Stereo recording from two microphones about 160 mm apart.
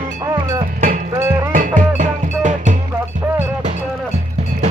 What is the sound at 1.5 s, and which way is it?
Music, 55° right (ahead or behind).